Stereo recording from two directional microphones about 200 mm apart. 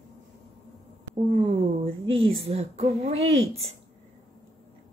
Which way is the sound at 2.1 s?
30° right (ahead or behind).